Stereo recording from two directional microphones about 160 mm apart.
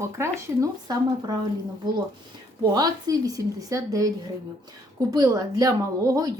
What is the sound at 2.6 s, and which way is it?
Speech, 25° right (ahead or behind).